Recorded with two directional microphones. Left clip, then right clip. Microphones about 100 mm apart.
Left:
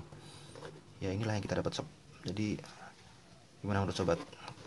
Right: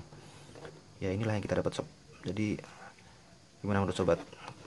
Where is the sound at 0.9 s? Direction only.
25° right (ahead or behind).